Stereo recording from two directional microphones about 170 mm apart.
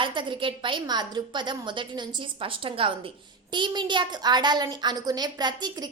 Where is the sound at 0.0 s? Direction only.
30° right (ahead or behind).